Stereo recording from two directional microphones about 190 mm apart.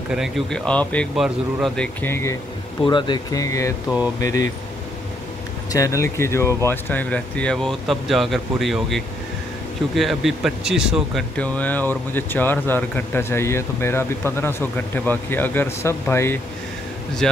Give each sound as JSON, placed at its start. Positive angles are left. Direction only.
{"t": 0.1, "sound": "speech", "side_deg": 0}
{"t": 2.8, "sound": "speech", "side_deg": 25}
{"t": 5.7, "sound": "speech", "side_deg": 15}
{"t": 11.3, "sound": "speech", "side_deg": 10}